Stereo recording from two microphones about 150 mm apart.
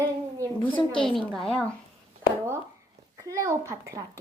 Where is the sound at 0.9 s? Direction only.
5° left (ahead or behind).